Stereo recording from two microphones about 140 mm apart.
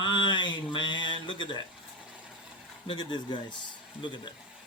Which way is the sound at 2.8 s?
35° left (ahead or behind).